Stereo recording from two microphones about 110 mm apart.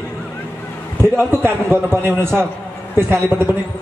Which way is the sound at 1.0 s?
25° right (ahead or behind).